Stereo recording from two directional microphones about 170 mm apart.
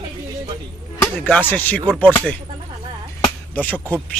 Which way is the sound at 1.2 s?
10° left (ahead or behind).